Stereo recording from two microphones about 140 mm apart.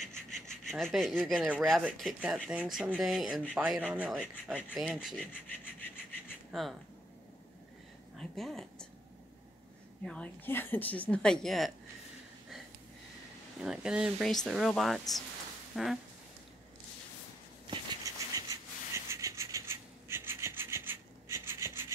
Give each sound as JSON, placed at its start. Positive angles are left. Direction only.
{"t": 0.5, "sound": "speech", "side_deg": 5}
{"t": 2.2, "sound": "speech", "side_deg": -10}
{"t": 5.2, "sound": "rub", "side_deg": 15}
{"t": 6.5, "sound": "speech", "side_deg": 0}
{"t": 8.2, "sound": "speech", "side_deg": 0}
{"t": 10.0, "sound": "a woman's voice", "side_deg": 10}
{"t": 13.6, "sound": "speech", "side_deg": -5}
{"t": 17.6, "sound": "a sound", "side_deg": -25}